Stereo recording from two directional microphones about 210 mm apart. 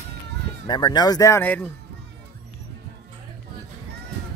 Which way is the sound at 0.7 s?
20° left (ahead or behind).